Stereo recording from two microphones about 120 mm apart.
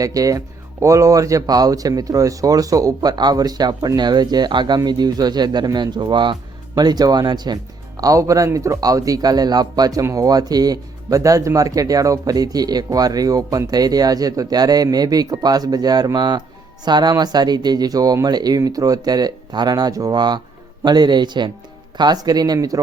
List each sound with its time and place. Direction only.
0.0 s speech: 30° right (ahead or behind)